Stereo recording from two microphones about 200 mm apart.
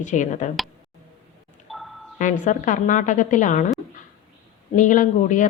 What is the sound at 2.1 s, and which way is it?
A woman's voice, 40° left (ahead or behind).